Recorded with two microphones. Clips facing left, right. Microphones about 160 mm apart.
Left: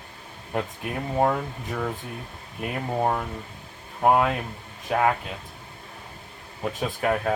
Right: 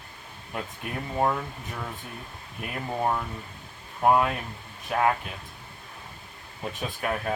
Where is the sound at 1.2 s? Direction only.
45° left (ahead or behind).